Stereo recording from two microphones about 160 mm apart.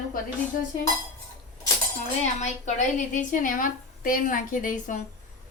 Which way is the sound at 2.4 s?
50° left (ahead or behind).